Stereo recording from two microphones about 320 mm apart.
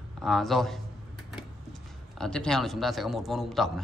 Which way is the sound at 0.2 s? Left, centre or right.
Centre.